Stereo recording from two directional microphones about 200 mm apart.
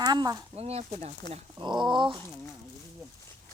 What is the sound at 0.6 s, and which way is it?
Speech, 30° right (ahead or behind).